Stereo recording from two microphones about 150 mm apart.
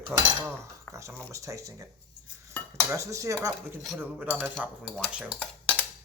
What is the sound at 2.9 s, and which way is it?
Speech, 20° right (ahead or behind).